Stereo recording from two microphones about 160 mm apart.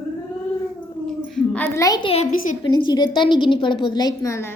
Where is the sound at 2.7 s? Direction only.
25° left (ahead or behind).